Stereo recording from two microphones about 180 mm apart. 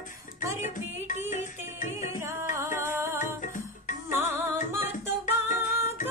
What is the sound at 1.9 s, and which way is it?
Music, 15° right (ahead or behind).